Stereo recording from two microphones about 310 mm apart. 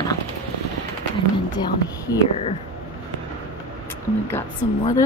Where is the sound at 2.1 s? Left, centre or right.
Centre.